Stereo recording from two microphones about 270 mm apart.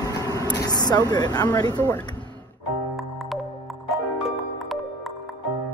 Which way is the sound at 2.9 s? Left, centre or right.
Centre.